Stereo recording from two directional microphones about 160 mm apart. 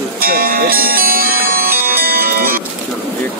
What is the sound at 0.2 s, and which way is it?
Music, 65° right (ahead or behind).